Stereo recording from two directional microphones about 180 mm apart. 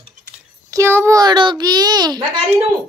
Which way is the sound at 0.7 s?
15° right (ahead or behind).